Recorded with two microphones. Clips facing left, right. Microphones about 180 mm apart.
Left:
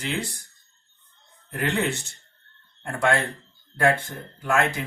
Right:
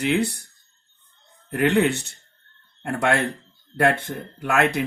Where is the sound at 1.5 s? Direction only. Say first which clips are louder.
Right 6 dB; 65° right (ahead or behind).